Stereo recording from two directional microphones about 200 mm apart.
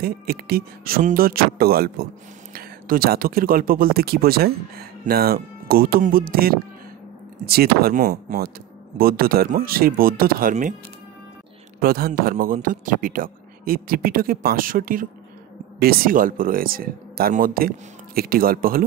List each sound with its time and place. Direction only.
0.0 s speech: 50° right (ahead or behind)
11.8 s speech: 45° right (ahead or behind)